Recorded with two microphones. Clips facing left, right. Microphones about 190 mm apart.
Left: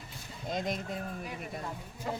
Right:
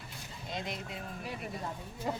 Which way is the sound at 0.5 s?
45° left (ahead or behind).